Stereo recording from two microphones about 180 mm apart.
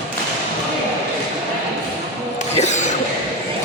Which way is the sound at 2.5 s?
40° left (ahead or behind).